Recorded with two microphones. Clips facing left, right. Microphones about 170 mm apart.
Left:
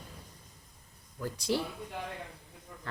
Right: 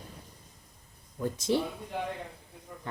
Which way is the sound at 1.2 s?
20° right (ahead or behind).